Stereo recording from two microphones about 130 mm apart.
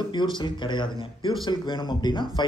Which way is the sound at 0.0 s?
35° left (ahead or behind).